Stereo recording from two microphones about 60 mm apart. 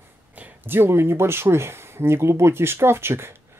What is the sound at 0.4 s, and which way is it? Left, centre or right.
Speech, right.